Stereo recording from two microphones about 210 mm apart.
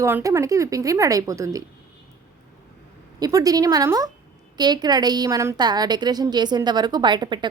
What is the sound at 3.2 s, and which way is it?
A woman's voice, 15° right (ahead or behind).